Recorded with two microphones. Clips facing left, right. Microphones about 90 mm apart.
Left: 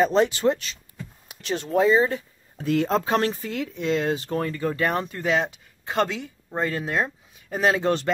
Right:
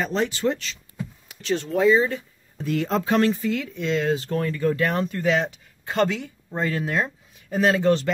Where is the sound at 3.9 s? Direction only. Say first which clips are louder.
Right 2 dB; 15° left (ahead or behind).